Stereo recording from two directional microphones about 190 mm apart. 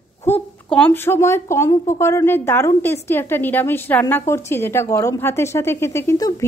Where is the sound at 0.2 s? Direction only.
10° left (ahead or behind).